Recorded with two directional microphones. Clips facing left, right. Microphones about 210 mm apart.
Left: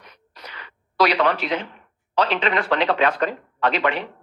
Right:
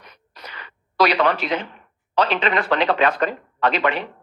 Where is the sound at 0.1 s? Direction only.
50° right (ahead or behind).